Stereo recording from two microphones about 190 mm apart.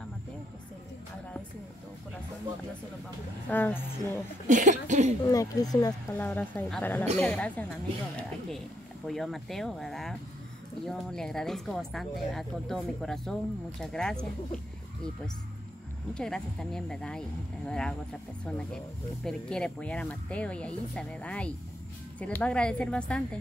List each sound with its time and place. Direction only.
3.4 s speech: 10° left (ahead or behind)
4.5 s speech: 40° right (ahead or behind)
5.2 s speech: 20° left (ahead or behind); by 14.1 s 5° left (ahead or behind)
16.2 s speech: 5° left (ahead or behind)